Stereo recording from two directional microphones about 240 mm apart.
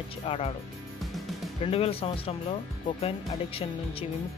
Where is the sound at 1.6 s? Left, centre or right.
Left.